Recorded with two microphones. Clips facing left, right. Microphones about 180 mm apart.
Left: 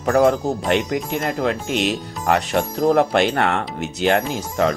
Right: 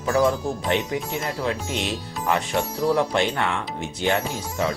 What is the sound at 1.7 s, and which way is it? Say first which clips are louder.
Speech: left 6 dB; 70° left (ahead or behind).